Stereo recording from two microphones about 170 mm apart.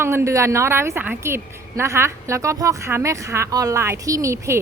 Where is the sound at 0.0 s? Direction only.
15° right (ahead or behind).